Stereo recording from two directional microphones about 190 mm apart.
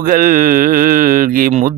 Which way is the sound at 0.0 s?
45° right (ahead or behind).